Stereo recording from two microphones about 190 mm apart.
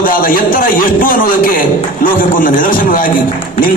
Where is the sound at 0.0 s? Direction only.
45° left (ahead or behind).